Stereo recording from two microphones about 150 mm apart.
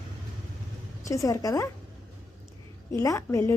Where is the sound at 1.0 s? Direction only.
20° left (ahead or behind).